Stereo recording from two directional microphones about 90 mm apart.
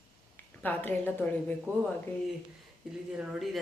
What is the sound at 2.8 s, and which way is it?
Speech, 5° right (ahead or behind).